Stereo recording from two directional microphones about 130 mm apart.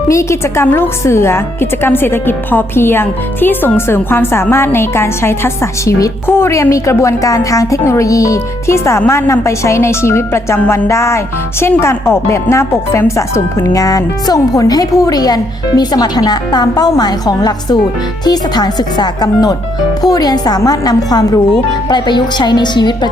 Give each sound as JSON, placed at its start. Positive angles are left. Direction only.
{"t": 0.1, "sound": "a woman's voice", "side_deg": 20}